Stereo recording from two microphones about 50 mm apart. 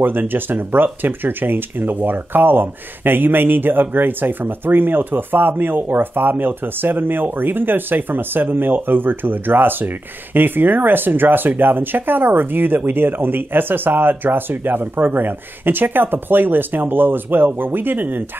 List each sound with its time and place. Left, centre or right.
0.0 s speech: right